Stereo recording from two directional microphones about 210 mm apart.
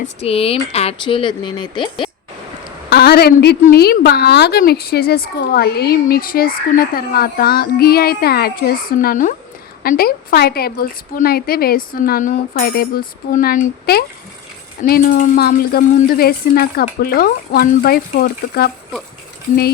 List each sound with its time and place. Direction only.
0.0 s speech: 30° left (ahead or behind)
2.9 s a woman's voice: 50° left (ahead or behind)